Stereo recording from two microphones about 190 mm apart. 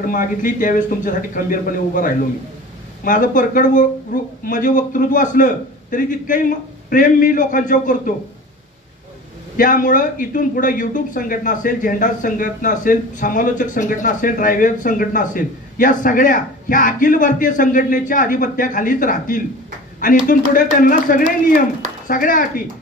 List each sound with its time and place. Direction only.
0.0 s speech: 45° left (ahead or behind)
9.6 s speech: 45° left (ahead or behind)